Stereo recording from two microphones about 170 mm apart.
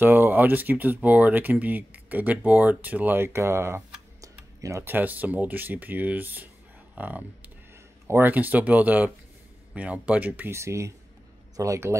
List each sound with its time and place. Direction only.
0.0 s speech: 10° right (ahead or behind)